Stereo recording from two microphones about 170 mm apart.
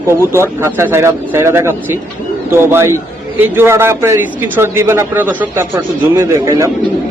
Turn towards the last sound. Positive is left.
turn(degrees=-15)  # may be behind; listen again after turning